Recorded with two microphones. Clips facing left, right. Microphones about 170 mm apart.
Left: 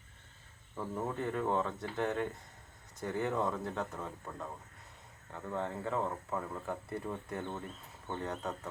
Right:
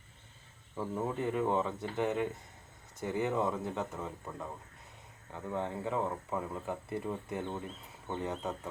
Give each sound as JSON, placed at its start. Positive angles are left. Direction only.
{"t": 0.8, "sound": "speech", "side_deg": -10}
{"t": 3.9, "sound": "speech", "side_deg": -5}